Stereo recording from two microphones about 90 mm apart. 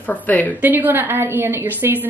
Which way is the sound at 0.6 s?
20° right (ahead or behind).